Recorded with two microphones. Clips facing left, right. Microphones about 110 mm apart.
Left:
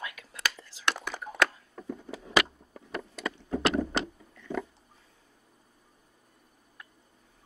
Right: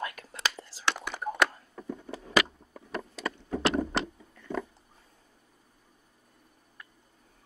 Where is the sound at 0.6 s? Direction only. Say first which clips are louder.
Right 5 dB; 40° right (ahead or behind).